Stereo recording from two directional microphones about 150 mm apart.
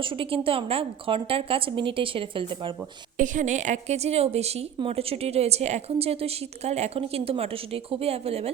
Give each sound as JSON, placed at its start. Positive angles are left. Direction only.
{"t": 0.0, "sound": "a woman's voice", "side_deg": -35}
{"t": 3.2, "sound": "a woman's voice", "side_deg": -55}